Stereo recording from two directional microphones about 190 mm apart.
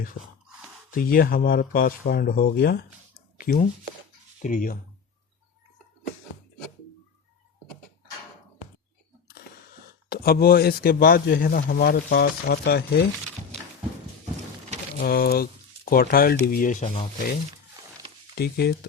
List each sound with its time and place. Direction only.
0.2 s a man's voice: 50° left (ahead or behind)
10.1 s a man's voice: 55° left (ahead or behind)
14.9 s a man's voice: 50° left (ahead or behind)
18.3 s speech: 55° left (ahead or behind)